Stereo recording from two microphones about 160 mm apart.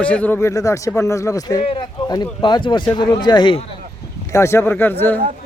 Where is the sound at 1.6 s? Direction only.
35° left (ahead or behind).